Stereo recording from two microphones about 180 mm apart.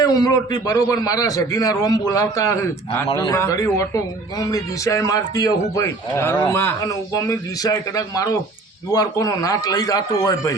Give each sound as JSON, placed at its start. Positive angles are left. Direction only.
{"t": 0.0, "sound": "a man's voice", "side_deg": 20}